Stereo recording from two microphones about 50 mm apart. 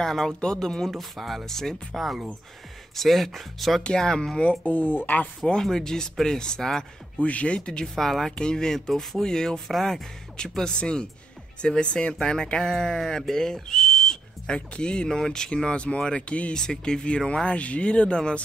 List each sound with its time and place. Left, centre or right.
0.0 s speech: centre
0.9 s speech: centre
3.0 s speech: centre
3.8 s speech: centre
4.4 s speech: left
5.4 s speech: centre
7.2 s speech: left
7.8 s speech: centre